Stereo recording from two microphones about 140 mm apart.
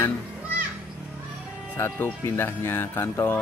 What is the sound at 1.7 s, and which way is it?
Speech, 20° left (ahead or behind).